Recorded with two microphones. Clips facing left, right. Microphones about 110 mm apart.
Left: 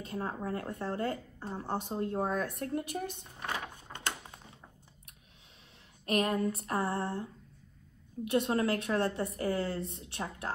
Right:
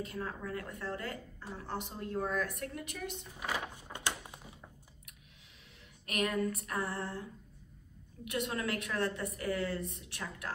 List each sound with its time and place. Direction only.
0.0 s a woman's voice: 30° left (ahead or behind)
3.3 s a sound: 10° right (ahead or behind)
6.0 s a woman's voice: 30° left (ahead or behind)
8.3 s a woman's voice: 30° left (ahead or behind)